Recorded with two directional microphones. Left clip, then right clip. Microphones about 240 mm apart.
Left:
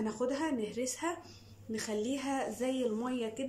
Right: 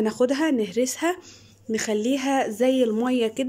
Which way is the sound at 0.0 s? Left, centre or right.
Right.